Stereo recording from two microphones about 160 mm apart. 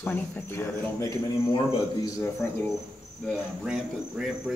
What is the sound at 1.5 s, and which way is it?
Speech, 25° left (ahead or behind).